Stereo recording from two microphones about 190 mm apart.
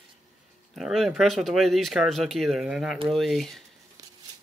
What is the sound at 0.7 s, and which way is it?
Speech, centre (ahead or behind).